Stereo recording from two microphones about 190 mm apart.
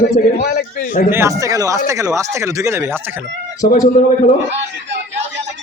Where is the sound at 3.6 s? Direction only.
45° left (ahead or behind).